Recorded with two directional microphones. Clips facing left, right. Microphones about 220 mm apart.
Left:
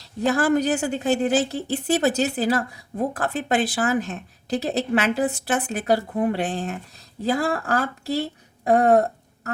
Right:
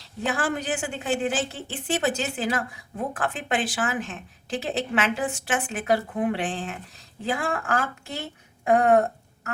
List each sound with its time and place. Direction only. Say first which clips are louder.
0.0 s a woman's voice: left 6 dB; 40° left (ahead or behind)